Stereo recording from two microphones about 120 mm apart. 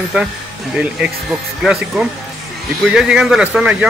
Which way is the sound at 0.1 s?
10° right (ahead or behind).